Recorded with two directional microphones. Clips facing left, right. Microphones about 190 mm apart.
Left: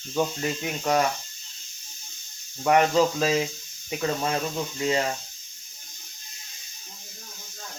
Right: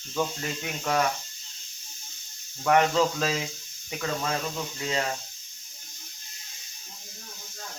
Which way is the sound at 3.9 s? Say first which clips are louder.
Left 3 dB; 20° left (ahead or behind).